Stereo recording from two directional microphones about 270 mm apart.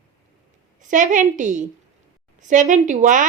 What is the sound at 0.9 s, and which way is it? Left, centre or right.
A woman's voice, right.